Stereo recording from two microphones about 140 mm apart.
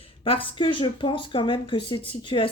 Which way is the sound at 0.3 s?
40° left (ahead or behind).